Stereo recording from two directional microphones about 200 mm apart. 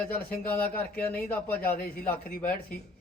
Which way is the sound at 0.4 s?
10° left (ahead or behind).